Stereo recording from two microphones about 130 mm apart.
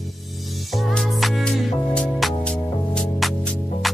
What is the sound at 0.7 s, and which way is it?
Music, centre (ahead or behind).